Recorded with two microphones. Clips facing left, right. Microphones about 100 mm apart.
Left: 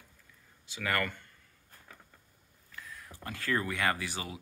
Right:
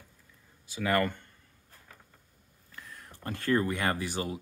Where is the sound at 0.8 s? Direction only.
25° right (ahead or behind).